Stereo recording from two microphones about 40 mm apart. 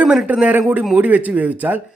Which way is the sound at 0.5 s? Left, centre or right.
Right.